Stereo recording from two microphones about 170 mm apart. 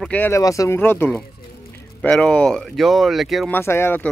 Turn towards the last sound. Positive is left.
turn(degrees=15)  # may be behind; listen again after turning